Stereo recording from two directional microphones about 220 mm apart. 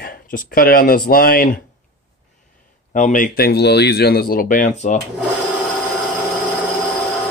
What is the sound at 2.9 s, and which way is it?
Speech, 35° left (ahead or behind).